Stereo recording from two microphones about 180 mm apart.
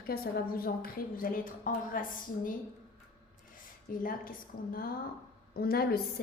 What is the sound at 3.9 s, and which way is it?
Speech, 50° left (ahead or behind).